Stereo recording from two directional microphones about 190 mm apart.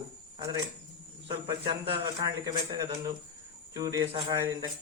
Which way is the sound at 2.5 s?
20° right (ahead or behind).